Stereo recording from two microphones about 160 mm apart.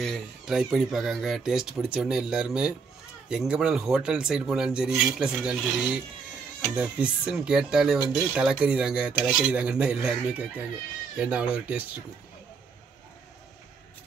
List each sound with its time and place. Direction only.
0.0 s speech: centre (ahead or behind)